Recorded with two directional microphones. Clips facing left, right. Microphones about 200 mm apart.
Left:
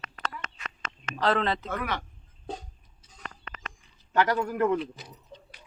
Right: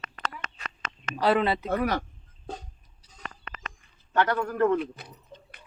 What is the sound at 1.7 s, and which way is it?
Speech, 40° right (ahead or behind).